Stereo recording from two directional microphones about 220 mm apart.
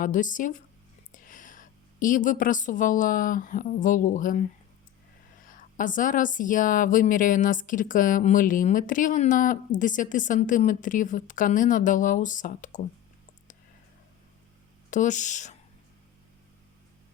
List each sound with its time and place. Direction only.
0.0 s a woman's voice: 35° left (ahead or behind)
5.5 s speech: 35° left (ahead or behind)
14.8 s speech: 35° left (ahead or behind)